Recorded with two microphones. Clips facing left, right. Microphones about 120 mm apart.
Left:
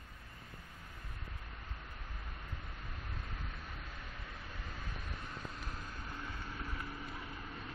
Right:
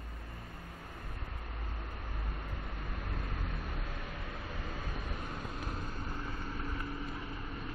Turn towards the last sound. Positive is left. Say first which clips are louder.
# right 5 dB
turn(degrees=-20)  # may be behind; listen again after turning